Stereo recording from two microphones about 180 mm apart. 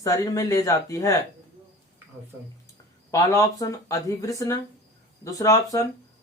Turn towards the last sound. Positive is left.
turn(degrees=20)  # may be behind; listen again after turning